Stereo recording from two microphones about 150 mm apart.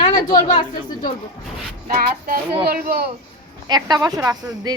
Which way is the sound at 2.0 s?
70° right (ahead or behind).